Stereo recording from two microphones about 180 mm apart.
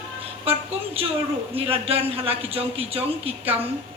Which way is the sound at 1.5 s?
30° right (ahead or behind).